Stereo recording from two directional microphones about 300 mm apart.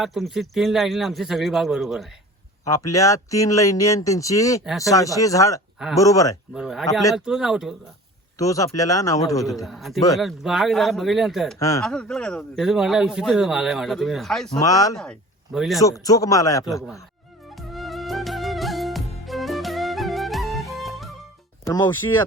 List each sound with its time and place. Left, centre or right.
0.0 s speech: centre
2.6 s speech: centre
6.5 s speech: centre
8.4 s speech: centre
9.5 s speech: centre
15.8 s speech: centre
17.6 s music: centre
21.6 s speech: centre